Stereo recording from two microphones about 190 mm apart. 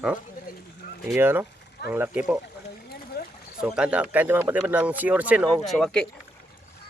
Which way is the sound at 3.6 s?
5° right (ahead or behind).